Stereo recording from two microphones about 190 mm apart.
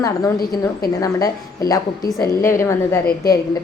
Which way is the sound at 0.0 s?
15° left (ahead or behind).